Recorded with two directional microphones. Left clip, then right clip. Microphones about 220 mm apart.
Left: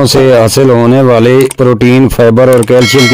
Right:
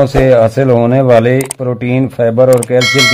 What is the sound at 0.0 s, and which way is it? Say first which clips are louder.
Speech: left 2 dB; 50° left (ahead or behind).